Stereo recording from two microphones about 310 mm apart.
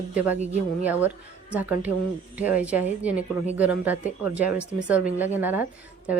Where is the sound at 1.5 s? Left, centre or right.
Centre.